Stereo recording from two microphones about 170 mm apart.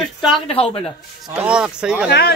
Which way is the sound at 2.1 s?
70° left (ahead or behind).